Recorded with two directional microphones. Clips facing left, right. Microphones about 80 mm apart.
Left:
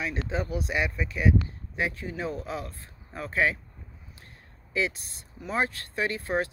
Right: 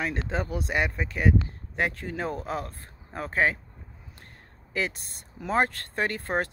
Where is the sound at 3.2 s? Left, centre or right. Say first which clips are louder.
Right 1 dB; right.